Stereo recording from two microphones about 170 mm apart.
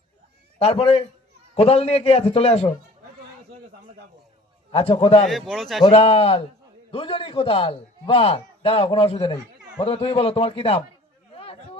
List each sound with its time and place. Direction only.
0.6 s a man's voice: 35° left (ahead or behind)
4.7 s a man's voice: 35° left (ahead or behind)
5.2 s speech: centre (ahead or behind)
5.9 s a man's voice: 35° left (ahead or behind)
11.3 s a sound: 35° left (ahead or behind)